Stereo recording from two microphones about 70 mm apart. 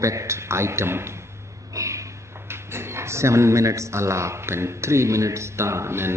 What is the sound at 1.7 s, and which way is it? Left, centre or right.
A man's voice, right.